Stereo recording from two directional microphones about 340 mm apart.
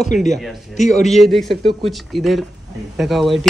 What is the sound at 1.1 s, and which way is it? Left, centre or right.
Speech, centre.